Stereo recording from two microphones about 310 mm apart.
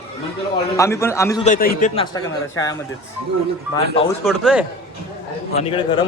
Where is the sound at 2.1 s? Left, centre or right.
Centre.